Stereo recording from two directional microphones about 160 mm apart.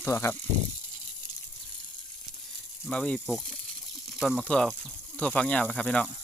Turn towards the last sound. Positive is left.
turn(degrees=5)  # may be behind; listen again after turning